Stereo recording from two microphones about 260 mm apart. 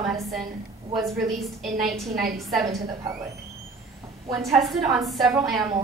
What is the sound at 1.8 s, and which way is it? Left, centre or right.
Speech, centre.